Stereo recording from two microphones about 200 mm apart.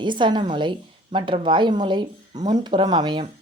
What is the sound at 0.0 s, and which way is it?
A woman's voice, 25° right (ahead or behind).